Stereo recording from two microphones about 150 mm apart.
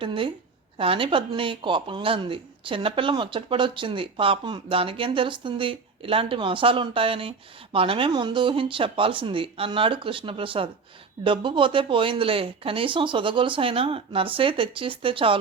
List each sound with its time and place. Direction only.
0.0 s speech: 35° right (ahead or behind)